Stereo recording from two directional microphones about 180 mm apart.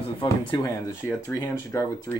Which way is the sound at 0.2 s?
30° left (ahead or behind).